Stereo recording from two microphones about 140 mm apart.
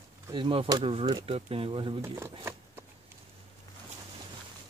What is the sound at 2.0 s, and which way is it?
Speech, 20° right (ahead or behind).